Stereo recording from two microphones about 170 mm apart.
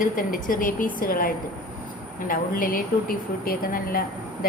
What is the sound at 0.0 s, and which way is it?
A woman's voice, 55° left (ahead or behind).